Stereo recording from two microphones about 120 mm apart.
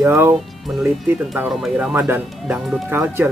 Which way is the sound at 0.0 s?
20° right (ahead or behind).